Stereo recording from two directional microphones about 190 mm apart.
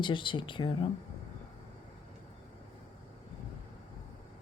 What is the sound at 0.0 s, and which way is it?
Speech, 25° left (ahead or behind).